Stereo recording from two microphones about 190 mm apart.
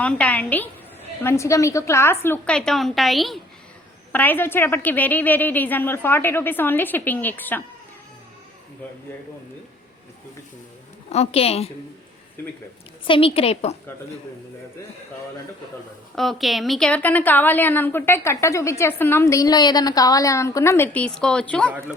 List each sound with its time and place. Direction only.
0.0 s a woman's voice: 5° left (ahead or behind)
11.1 s a woman's voice: 35° left (ahead or behind)
13.1 s a woman's voice: 30° left (ahead or behind)
16.1 s a woman's voice: centre (ahead or behind)